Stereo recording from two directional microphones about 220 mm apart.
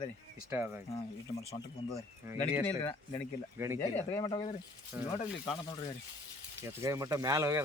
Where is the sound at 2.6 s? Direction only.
10° left (ahead or behind).